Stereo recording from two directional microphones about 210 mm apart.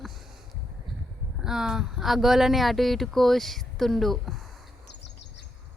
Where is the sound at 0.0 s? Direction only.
Centre (ahead or behind).